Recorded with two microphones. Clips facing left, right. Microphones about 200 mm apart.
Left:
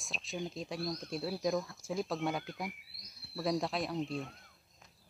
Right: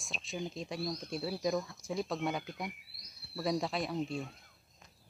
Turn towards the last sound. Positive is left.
turn(degrees=0)  # may be behind; listen again after turning